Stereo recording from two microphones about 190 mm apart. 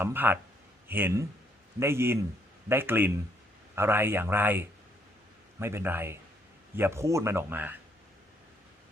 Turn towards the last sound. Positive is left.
turn(degrees=-10)  # may be behind; listen again after turning